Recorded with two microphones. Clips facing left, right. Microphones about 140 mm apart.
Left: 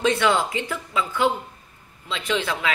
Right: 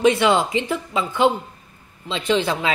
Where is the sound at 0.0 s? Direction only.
15° right (ahead or behind).